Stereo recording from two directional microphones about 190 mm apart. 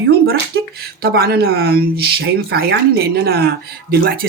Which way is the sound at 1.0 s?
55° right (ahead or behind).